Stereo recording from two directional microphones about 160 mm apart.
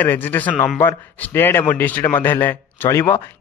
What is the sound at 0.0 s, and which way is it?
A man's voice, 10° left (ahead or behind).